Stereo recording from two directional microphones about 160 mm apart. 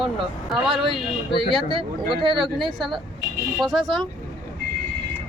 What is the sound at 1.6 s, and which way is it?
Speech, 30° right (ahead or behind).